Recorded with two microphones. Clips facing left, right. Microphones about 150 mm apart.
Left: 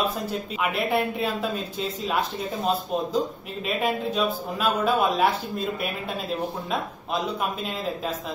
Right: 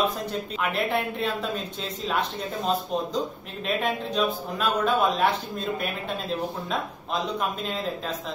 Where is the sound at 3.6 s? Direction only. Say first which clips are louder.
Left 1 dB; 5° left (ahead or behind).